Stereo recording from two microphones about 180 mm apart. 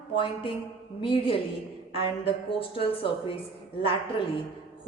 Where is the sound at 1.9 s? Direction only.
30° left (ahead or behind).